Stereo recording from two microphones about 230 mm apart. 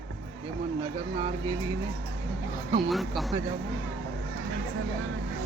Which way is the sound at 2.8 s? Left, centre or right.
Centre.